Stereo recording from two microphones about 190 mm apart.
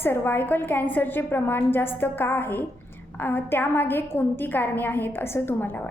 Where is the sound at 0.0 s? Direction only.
10° left (ahead or behind).